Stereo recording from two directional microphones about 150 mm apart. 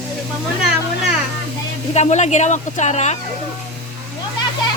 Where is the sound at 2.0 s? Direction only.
50° left (ahead or behind).